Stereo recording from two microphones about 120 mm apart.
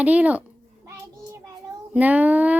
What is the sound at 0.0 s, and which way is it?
Speech, 10° right (ahead or behind).